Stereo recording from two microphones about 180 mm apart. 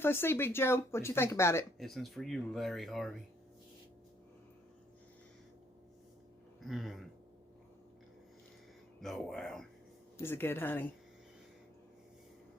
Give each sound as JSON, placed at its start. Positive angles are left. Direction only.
{"t": 0.0, "sound": "speech", "side_deg": 10}
{"t": 1.8, "sound": "speech", "side_deg": 0}
{"t": 6.6, "sound": "speech", "side_deg": 0}
{"t": 9.0, "sound": "speech", "side_deg": 0}
{"t": 10.2, "sound": "speech", "side_deg": 10}